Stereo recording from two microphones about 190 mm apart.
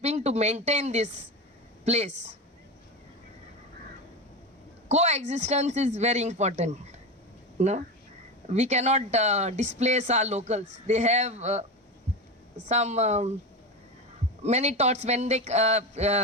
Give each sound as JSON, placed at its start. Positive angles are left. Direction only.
{"t": 0.0, "sound": "speech", "side_deg": -35}
{"t": 4.9, "sound": "speech", "side_deg": -35}
{"t": 12.6, "sound": "speech", "side_deg": -35}
{"t": 14.4, "sound": "speech", "side_deg": -35}